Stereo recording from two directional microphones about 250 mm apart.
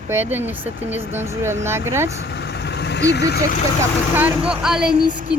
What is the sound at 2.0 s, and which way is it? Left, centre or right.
Vehicle, left.